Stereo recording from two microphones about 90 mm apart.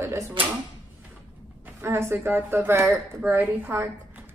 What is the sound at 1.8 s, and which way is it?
Speech, 30° right (ahead or behind).